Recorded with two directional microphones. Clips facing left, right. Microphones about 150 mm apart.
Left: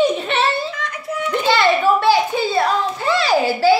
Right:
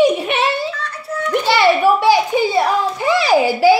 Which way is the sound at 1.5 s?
15° right (ahead or behind).